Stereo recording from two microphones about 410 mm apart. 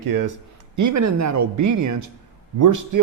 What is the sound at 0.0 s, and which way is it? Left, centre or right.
Speech, right.